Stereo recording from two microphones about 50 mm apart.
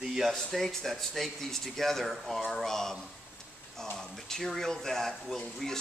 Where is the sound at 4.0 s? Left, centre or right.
Centre.